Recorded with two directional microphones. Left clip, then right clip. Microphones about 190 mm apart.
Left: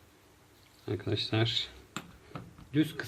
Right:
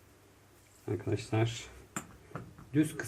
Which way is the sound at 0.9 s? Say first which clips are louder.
Left 2 dB; 15° left (ahead or behind).